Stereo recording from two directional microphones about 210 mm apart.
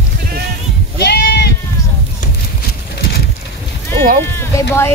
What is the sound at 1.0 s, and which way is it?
Sheep, 50° left (ahead or behind).